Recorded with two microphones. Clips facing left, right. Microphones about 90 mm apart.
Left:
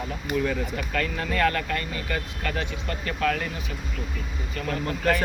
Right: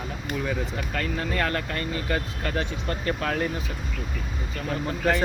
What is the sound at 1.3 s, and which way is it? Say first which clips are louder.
Speech: left 6 dB; 30° right (ahead or behind).